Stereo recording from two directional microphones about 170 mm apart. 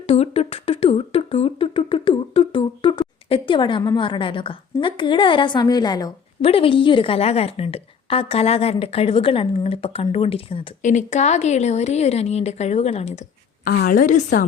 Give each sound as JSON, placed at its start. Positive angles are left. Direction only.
{"t": 0.1, "sound": "a sound", "side_deg": 35}
{"t": 6.4, "sound": "a woman's voice", "side_deg": 35}
{"t": 10.8, "sound": "a woman's voice", "side_deg": 45}
{"t": 13.7, "sound": "a woman's voice", "side_deg": 60}